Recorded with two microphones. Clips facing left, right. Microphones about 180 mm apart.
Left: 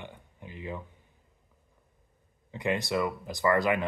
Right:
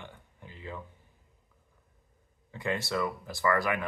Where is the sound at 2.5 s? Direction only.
15° left (ahead or behind).